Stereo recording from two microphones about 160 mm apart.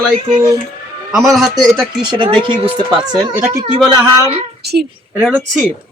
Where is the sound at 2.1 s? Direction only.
30° right (ahead or behind).